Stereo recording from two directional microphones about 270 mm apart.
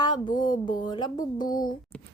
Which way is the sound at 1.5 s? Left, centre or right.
Left.